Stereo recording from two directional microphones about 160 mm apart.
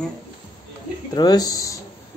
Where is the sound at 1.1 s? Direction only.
25° left (ahead or behind).